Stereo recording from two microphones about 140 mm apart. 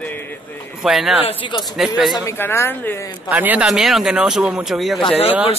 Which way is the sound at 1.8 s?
Centre (ahead or behind).